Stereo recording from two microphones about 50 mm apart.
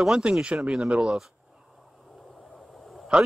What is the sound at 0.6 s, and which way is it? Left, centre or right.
Speech, centre.